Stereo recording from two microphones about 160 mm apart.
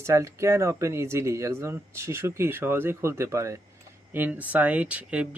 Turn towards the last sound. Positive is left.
turn(degrees=-10)  # may be behind; listen again after turning